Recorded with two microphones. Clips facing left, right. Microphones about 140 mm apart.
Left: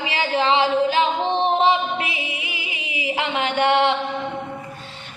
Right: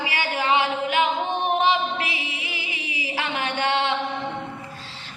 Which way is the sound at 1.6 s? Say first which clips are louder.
Left 3 dB; 20° left (ahead or behind).